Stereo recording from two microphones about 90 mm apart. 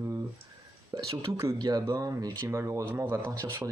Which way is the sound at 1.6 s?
45° right (ahead or behind).